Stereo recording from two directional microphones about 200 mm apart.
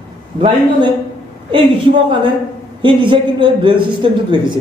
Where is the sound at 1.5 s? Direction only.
25° right (ahead or behind).